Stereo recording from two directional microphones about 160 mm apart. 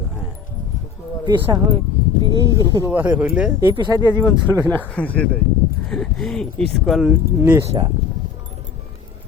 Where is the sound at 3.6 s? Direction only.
25° right (ahead or behind).